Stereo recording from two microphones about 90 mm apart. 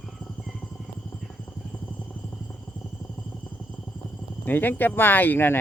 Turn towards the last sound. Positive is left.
turn(degrees=25)  # may be behind; listen again after turning